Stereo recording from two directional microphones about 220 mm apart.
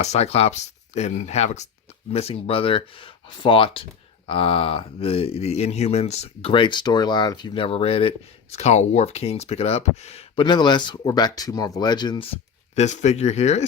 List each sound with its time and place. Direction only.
0.0 s speech: 30° left (ahead or behind)
12.7 s speech: 30° left (ahead or behind)